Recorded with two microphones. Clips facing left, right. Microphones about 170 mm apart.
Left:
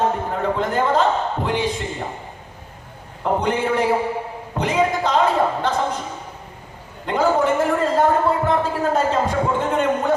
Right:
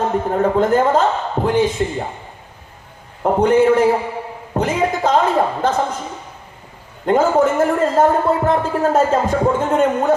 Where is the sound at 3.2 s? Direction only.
45° right (ahead or behind).